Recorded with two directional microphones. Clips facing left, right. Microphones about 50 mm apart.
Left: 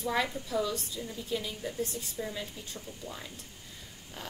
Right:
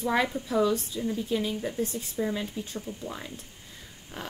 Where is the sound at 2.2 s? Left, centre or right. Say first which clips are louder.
Right 8 dB; right.